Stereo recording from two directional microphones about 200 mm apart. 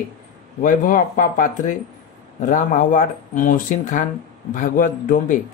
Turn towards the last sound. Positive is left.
turn(degrees=40)  # may be behind; listen again after turning